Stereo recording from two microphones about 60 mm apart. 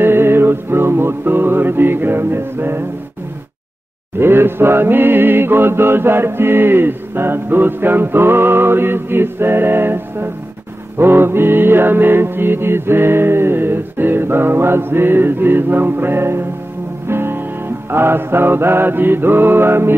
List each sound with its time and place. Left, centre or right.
0.0 s music: right
4.2 s music: right